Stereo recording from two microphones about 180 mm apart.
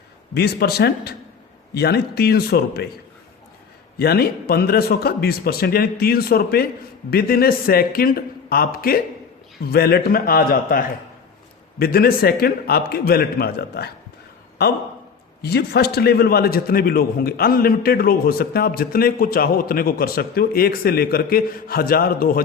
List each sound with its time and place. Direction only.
0.3 s a man's voice: 60° left (ahead or behind)
3.9 s a man's voice: 60° left (ahead or behind)